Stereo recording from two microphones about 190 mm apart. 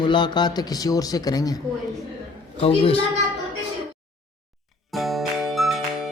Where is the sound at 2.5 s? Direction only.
30° left (ahead or behind).